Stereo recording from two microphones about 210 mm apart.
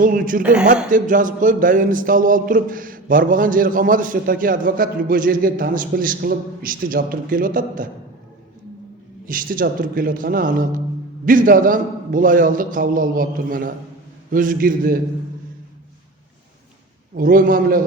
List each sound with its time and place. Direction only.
0.0 s speech: 40° right (ahead or behind)
9.2 s speech: 40° right (ahead or behind)
17.2 s speech: 40° right (ahead or behind)